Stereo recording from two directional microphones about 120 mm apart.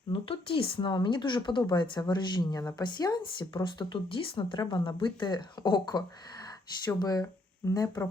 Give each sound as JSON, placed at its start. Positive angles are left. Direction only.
{"t": 0.1, "sound": "speech", "side_deg": 50}